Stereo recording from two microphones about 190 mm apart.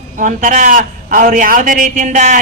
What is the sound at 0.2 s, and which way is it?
A man's voice, 45° right (ahead or behind).